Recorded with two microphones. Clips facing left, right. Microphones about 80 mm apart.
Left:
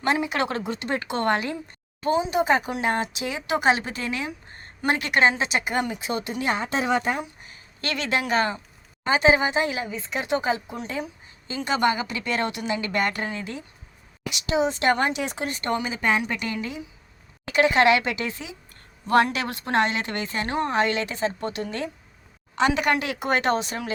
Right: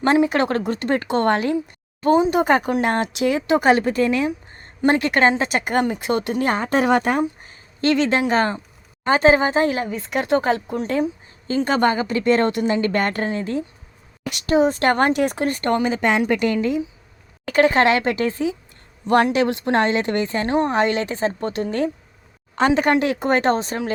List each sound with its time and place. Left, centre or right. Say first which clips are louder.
0.0 s a woman's voice: right 7 dB; right
0.5 s speech: right 6 dB; right
1.0 s a woman's voice: right 4 dB; right
2.0 s speech: right 5 dB; right
4.8 s a woman's voice: right 6 dB; right
5.4 s speech: right 5 dB; right
7.4 s speech: right 12 dB; right
11.4 s a woman's voice: right 5 dB; right
14.3 s a woman's voice: right 6 dB; right